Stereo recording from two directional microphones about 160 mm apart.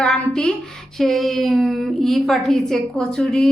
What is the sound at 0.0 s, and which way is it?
A woman's voice, 5° left (ahead or behind).